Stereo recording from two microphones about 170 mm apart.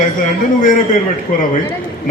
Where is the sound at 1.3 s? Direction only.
55° left (ahead or behind).